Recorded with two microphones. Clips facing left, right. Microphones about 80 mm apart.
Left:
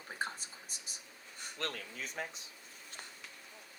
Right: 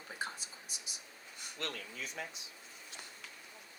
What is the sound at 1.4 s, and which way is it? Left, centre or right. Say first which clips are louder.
Speech: left 2 dB; left.